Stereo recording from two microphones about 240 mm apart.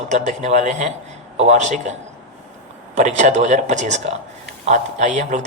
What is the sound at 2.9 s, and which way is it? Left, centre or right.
Speech, right.